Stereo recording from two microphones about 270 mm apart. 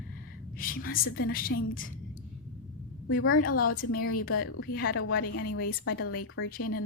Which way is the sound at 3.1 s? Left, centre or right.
Left.